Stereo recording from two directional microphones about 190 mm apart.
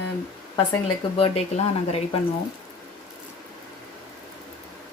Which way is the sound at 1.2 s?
35° left (ahead or behind).